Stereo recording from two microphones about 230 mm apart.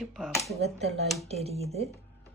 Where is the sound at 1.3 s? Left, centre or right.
Right.